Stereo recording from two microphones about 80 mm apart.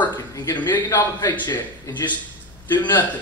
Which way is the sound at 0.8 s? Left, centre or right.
Left.